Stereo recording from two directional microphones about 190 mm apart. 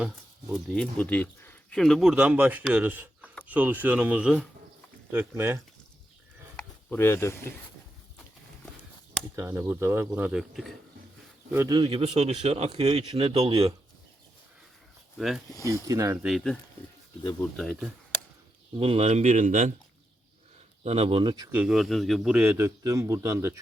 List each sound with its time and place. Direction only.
0.5 s a man's voice: centre (ahead or behind)
6.6 s speech: 10° left (ahead or behind)
9.3 s a man's voice: 10° right (ahead or behind)
11.5 s speech: 15° right (ahead or behind)
15.2 s speech: centre (ahead or behind)
15.6 s a man's voice: 15° right (ahead or behind)
16.2 s speech: centre (ahead or behind)
17.6 s speech: centre (ahead or behind)
18.8 s speech: 30° right (ahead or behind)
20.8 s speech: 30° right (ahead or behind)
21.5 s a man's voice: 5° right (ahead or behind)